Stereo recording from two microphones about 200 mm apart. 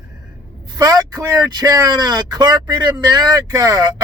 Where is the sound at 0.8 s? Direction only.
20° right (ahead or behind).